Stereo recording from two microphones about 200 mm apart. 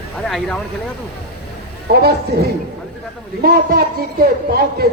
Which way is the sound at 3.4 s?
50° right (ahead or behind).